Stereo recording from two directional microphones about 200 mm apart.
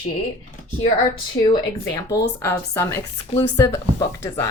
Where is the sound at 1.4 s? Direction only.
20° left (ahead or behind).